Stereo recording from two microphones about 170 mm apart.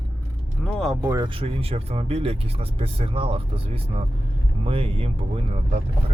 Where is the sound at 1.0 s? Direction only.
15° right (ahead or behind).